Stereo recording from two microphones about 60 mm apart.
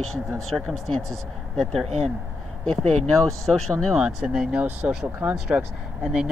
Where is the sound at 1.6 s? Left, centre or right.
Centre.